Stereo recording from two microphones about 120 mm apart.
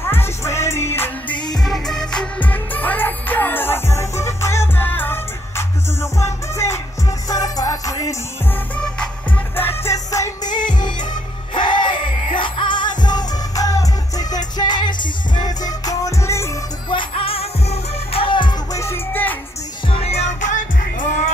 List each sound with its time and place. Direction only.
0.1 s music: 20° left (ahead or behind)
1.6 s music: 5° left (ahead or behind); by 8.1 s 30° left (ahead or behind)
8.7 s music: 5° left (ahead or behind)
9.6 s music: 20° left (ahead or behind)
10.5 s music: 40° left (ahead or behind)
16.9 s music: 50° left (ahead or behind)
18.7 s music: 25° left (ahead or behind)
19.9 s music: 60° left (ahead or behind); by 21.1 s 75° left (ahead or behind)